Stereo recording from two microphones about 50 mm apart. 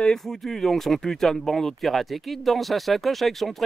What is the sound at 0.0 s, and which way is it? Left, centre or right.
Speech, centre.